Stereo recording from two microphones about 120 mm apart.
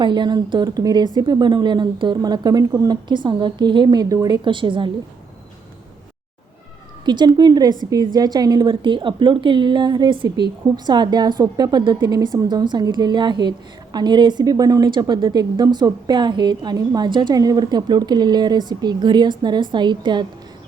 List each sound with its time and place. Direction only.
0.0 s a woman's voice: 40° right (ahead or behind)
4.4 s a woman's voice: 45° right (ahead or behind)
7.0 s a woman's voice: 40° right (ahead or behind)